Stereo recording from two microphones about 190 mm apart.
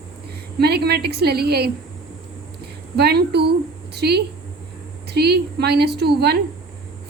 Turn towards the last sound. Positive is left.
turn(degrees=-60)  # may be behind; listen again after turning